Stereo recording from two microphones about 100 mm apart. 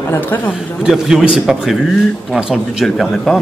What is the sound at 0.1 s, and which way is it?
Speech, 20° left (ahead or behind).